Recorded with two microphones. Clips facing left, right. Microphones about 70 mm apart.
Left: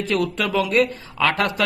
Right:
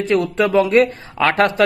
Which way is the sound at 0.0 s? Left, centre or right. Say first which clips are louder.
Right 5 dB; right.